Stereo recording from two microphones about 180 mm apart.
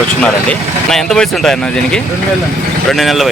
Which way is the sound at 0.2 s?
5° left (ahead or behind).